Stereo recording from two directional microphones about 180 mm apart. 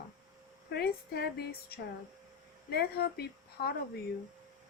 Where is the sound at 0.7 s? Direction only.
65° left (ahead or behind).